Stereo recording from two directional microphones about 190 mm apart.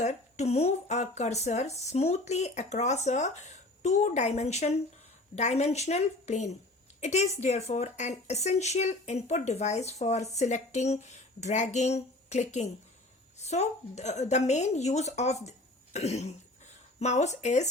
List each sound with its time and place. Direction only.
0.0 s a woman's voice: 35° left (ahead or behind)